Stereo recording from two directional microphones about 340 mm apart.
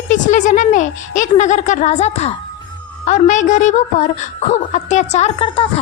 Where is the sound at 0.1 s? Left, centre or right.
Left.